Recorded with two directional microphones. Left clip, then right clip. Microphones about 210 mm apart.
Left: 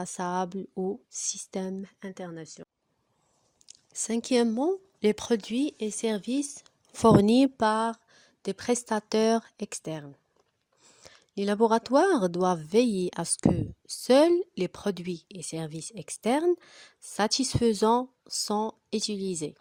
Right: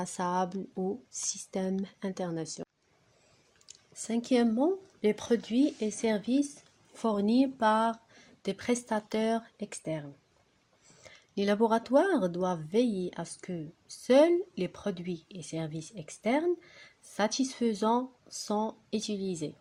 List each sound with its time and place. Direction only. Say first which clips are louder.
0.0 s speech: even; 30° left (ahead or behind)
1.8 s speech: right 4 dB; 20° left (ahead or behind)
3.7 s speech: left 4 dB; 50° left (ahead or behind)
11.0 s speech: even; 35° left (ahead or behind)